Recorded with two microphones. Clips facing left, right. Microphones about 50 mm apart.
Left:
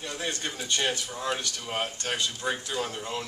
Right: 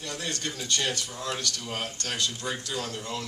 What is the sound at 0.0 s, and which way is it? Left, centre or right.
Speech, left.